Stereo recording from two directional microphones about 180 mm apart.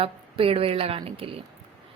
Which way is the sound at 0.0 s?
30° right (ahead or behind).